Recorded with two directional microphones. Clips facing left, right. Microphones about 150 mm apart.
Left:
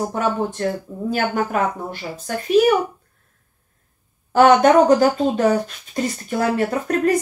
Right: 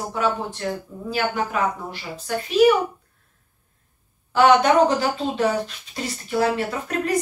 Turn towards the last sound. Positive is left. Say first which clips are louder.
# left 6 dB
turn(degrees=45)  # may be behind; listen again after turning